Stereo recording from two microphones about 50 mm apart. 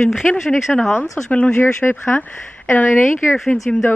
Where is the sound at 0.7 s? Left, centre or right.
Centre.